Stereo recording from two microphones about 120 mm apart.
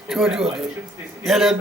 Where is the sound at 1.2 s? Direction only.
Centre (ahead or behind).